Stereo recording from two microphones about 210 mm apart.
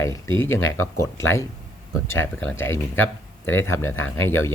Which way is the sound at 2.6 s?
70° left (ahead or behind).